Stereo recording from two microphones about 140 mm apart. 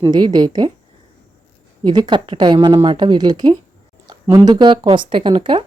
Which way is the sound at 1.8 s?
30° right (ahead or behind).